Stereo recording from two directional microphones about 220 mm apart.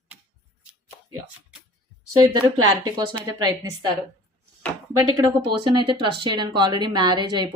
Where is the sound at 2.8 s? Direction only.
20° right (ahead or behind).